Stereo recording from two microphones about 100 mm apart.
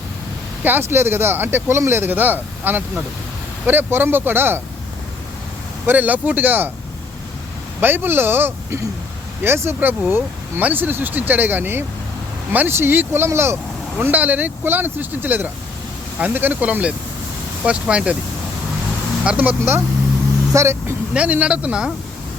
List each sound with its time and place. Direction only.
0.6 s speech: 20° right (ahead or behind)
5.8 s speech: 20° right (ahead or behind)
7.8 s speech: 20° right (ahead or behind)
19.2 s speech: 15° right (ahead or behind)
21.1 s speech: 15° right (ahead or behind)